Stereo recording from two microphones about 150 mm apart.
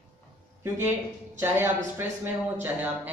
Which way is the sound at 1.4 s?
15° right (ahead or behind).